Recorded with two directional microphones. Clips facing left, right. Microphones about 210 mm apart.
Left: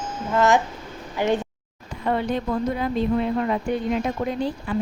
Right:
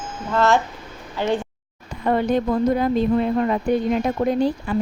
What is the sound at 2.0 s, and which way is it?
Speech, 45° right (ahead or behind).